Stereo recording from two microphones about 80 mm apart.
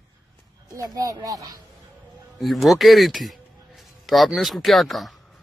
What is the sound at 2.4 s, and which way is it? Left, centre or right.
A man's voice, centre.